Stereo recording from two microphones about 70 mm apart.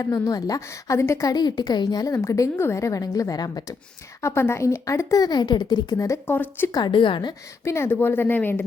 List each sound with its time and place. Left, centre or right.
0.0 s speech: left
0.7 s a woman's voice: left
1.3 s a woman's voice: left
4.2 s speech: left
6.2 s speech: left
6.7 s a woman's voice: left
7.6 s a woman's voice: left